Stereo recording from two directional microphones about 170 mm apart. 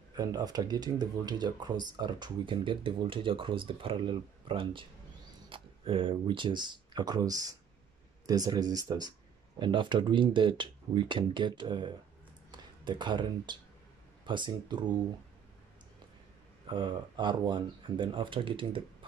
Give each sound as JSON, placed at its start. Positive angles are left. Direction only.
{"t": 0.1, "sound": "speech", "side_deg": -20}
{"t": 16.6, "sound": "speech", "side_deg": -30}